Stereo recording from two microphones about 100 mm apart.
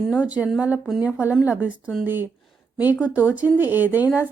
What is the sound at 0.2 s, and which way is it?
Speech, 15° right (ahead or behind).